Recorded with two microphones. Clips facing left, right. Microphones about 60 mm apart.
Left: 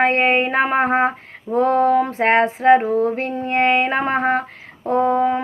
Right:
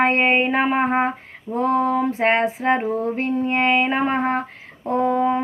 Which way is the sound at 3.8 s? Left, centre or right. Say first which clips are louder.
Left 1 dB; left.